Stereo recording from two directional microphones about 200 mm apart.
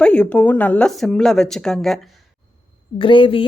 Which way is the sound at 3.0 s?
25° left (ahead or behind).